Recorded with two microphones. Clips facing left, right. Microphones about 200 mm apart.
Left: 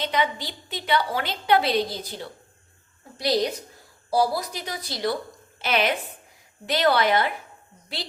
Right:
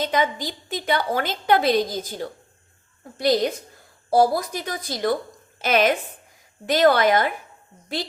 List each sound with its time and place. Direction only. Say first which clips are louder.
0.0 s a woman's voice: right 3 dB; 45° right (ahead or behind)